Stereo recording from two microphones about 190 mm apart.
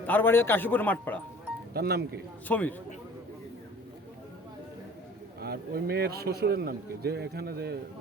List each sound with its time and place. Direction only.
0.0 s speech: 10° left (ahead or behind)
1.7 s a man's voice: 55° right (ahead or behind)
2.5 s speech: 10° left (ahead or behind)
5.4 s a man's voice: 55° right (ahead or behind)